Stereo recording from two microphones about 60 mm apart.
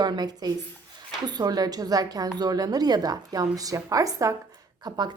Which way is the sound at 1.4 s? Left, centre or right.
Right.